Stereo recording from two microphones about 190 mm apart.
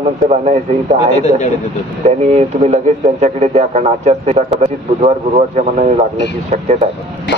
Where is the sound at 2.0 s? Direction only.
35° right (ahead or behind).